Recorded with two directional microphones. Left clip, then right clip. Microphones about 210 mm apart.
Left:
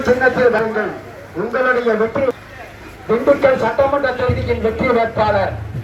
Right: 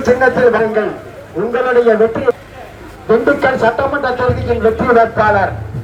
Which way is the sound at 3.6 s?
25° right (ahead or behind).